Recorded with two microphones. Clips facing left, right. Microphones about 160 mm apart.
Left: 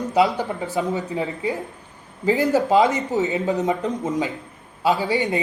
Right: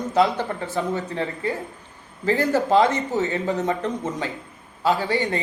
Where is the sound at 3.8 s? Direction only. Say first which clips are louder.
Left 3 dB; 10° left (ahead or behind).